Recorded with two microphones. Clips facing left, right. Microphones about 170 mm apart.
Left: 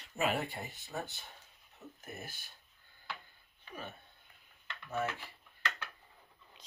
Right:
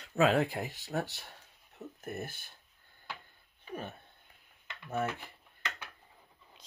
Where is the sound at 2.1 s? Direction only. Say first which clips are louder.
Right 8 dB; 50° right (ahead or behind).